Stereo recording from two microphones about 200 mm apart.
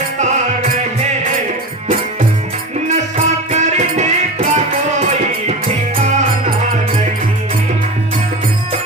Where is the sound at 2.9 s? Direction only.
35° right (ahead or behind).